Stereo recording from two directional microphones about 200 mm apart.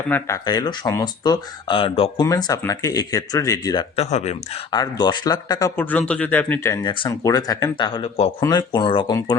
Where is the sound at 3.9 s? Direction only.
35° left (ahead or behind).